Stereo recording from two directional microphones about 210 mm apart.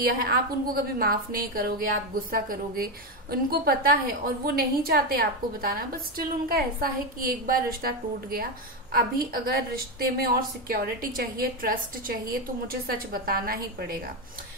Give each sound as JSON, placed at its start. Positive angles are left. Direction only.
{"t": 0.2, "sound": "a woman's voice", "side_deg": -45}